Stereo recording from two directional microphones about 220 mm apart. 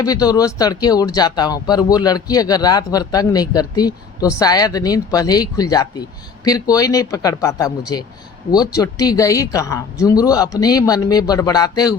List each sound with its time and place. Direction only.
0.0 s speech: 15° left (ahead or behind)